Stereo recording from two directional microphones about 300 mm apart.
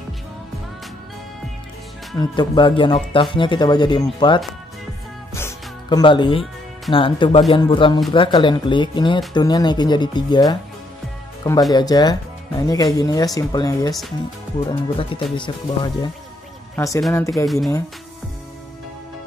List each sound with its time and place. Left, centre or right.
2.1 s speech: centre
5.3 s music: centre
6.9 s speech: centre
11.7 s speech: centre